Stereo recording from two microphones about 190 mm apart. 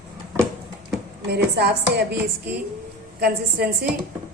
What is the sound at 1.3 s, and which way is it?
Speech, 60° right (ahead or behind).